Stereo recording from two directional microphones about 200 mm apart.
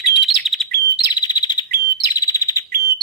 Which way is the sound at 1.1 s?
20° left (ahead or behind).